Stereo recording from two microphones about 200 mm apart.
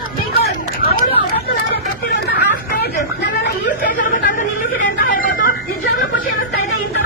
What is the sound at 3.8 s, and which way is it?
Chatter, 40° left (ahead or behind).